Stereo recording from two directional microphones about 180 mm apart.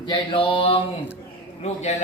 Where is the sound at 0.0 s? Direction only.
25° left (ahead or behind).